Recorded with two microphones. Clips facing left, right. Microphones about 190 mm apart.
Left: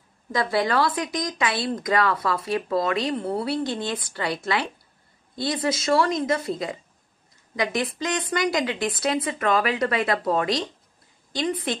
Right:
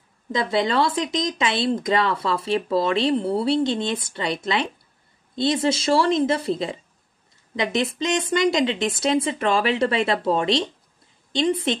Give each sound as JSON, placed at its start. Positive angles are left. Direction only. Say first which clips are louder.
{"t": 0.3, "sound": "speech", "louder": "right 1 dB", "side_deg": -20}